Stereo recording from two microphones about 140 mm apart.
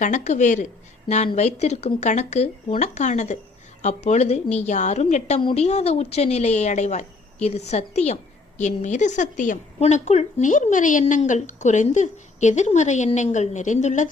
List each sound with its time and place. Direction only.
0.0 s a woman's voice: 60° left (ahead or behind)